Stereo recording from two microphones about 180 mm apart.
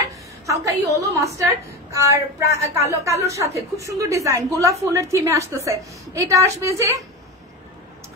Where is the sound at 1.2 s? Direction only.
15° right (ahead or behind).